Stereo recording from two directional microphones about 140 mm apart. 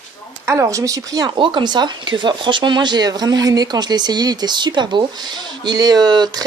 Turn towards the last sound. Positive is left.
turn(degrees=-30)  # may be behind; listen again after turning